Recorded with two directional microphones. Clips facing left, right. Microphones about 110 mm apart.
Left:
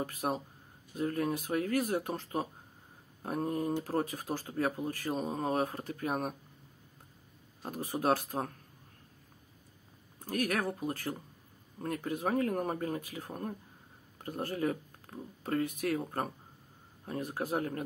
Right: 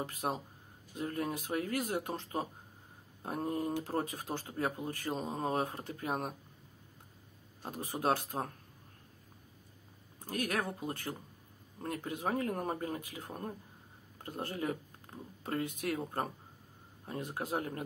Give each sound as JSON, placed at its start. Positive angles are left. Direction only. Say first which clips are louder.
{"t": 0.0, "sound": "speech", "louder": "left 2 dB", "side_deg": -25}
{"t": 3.3, "sound": "speech", "louder": "left 2 dB", "side_deg": -30}
{"t": 7.6, "sound": "speech", "louder": "left 2 dB", "side_deg": -25}
{"t": 10.2, "sound": "speech", "louder": "left 3 dB", "side_deg": -25}
{"t": 17.1, "sound": "speech", "louder": "left 3 dB", "side_deg": -25}